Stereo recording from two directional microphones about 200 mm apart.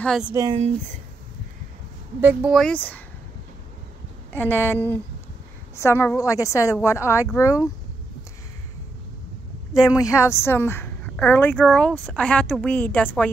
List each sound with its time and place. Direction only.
0.0 s speech: centre (ahead or behind)
0.3 s speech: 15° right (ahead or behind)
2.2 s speech: 5° right (ahead or behind)
4.3 s a woman's voice: 10° left (ahead or behind)
5.8 s a woman's voice: 15° left (ahead or behind)
9.8 s a woman's voice: 15° left (ahead or behind)